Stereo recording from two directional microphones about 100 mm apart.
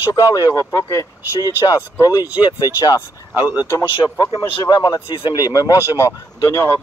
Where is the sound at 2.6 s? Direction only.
25° right (ahead or behind).